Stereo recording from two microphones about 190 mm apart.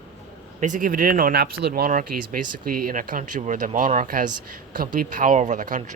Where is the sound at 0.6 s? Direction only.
45° right (ahead or behind).